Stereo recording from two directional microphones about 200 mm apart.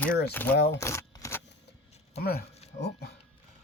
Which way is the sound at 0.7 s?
15° left (ahead or behind).